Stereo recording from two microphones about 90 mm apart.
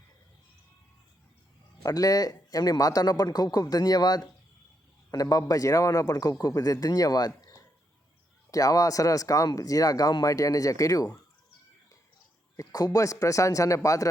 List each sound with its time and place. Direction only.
1.8 s a man's voice: 45° left (ahead or behind)
12.5 s speech: 45° left (ahead or behind)